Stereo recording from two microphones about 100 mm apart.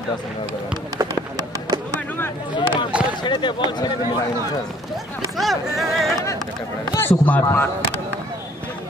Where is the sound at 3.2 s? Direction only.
50° left (ahead or behind).